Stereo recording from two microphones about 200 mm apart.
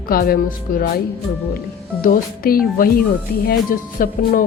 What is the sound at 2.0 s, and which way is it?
Speech, 45° left (ahead or behind).